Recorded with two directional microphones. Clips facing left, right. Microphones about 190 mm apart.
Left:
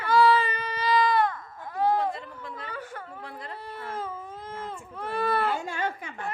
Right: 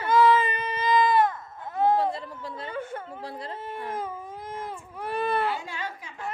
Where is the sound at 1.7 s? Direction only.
25° right (ahead or behind).